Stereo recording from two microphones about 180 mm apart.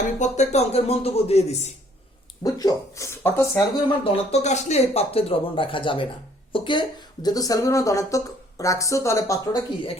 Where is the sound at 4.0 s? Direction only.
35° left (ahead or behind); by 9.6 s 15° left (ahead or behind).